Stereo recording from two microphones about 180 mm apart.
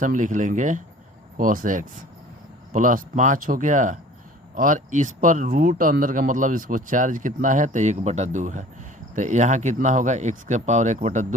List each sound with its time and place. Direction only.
0.0 s speech: 45° right (ahead or behind)